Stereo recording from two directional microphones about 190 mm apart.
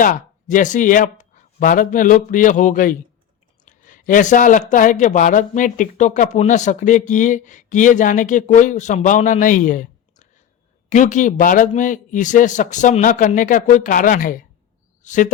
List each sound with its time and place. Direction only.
0.0 s a man's voice: 45° left (ahead or behind)